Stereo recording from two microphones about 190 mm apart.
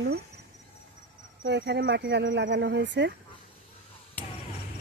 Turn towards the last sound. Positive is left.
turn(degrees=-70)  # may be behind; listen again after turning